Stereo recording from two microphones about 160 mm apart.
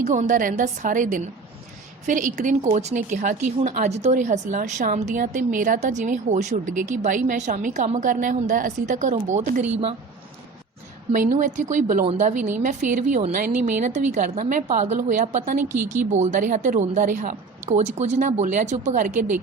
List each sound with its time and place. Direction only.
0.0 s a woman's voice: 50° right (ahead or behind)
11.1 s a woman's voice: 55° right (ahead or behind)